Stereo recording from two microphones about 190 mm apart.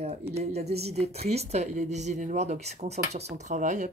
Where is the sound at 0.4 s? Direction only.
35° right (ahead or behind).